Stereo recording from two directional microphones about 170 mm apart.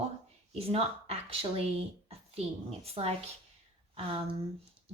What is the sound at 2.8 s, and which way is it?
Speech, 35° right (ahead or behind).